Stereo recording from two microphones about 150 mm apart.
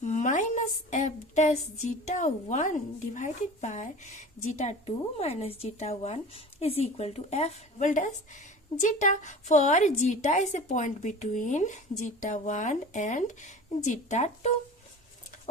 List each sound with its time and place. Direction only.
0.0 s a woman's voice: 55° left (ahead or behind)